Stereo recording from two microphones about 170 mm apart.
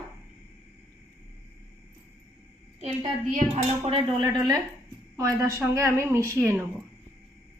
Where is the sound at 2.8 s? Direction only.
40° right (ahead or behind).